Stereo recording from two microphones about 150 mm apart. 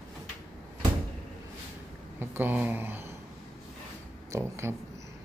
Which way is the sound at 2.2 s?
15° right (ahead or behind).